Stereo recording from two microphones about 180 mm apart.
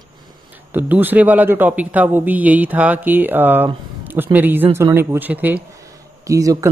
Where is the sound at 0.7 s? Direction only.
10° right (ahead or behind).